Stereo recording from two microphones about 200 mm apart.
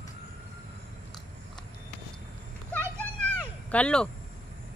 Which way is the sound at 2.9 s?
5° left (ahead or behind).